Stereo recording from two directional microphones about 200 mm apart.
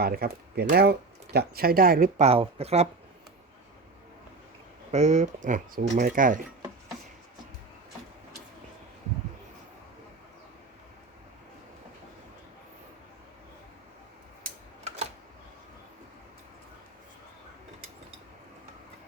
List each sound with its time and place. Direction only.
0.0 s speech: 50° right (ahead or behind); by 2.8 s 30° right (ahead or behind)
4.9 s speech: 35° right (ahead or behind)
14.4 s typewriter: 35° right (ahead or behind)